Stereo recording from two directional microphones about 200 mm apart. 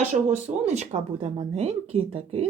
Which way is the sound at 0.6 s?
35° right (ahead or behind).